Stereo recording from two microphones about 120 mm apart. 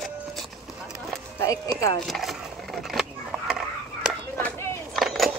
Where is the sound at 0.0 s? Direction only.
Centre (ahead or behind).